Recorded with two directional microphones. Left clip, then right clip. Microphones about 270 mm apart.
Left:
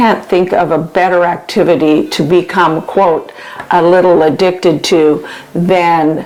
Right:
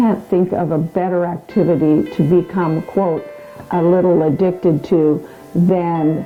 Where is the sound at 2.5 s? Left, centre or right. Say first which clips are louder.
Left 10 dB; centre.